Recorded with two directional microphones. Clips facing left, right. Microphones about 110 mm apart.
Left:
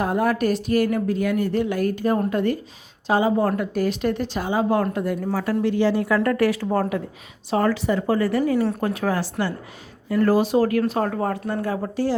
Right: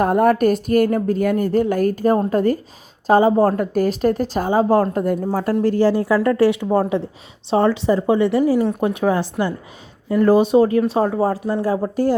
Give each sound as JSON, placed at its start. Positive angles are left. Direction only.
{"t": 0.0, "sound": "a woman's voice", "side_deg": -50}
{"t": 6.2, "sound": "speech", "side_deg": -25}
{"t": 11.4, "sound": "a woman's voice", "side_deg": -35}